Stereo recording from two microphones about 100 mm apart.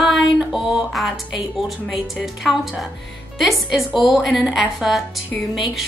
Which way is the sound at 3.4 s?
Centre (ahead or behind).